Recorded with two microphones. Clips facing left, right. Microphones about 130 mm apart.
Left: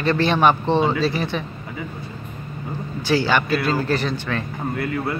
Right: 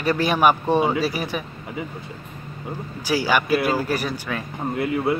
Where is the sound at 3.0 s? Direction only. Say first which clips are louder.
Left 2 dB; 10° right (ahead or behind).